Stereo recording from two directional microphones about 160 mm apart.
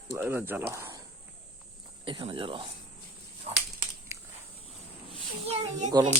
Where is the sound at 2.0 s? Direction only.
35° right (ahead or behind).